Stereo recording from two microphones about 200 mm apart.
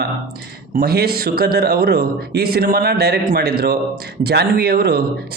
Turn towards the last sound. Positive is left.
turn(degrees=-50)  # may be behind; listen again after turning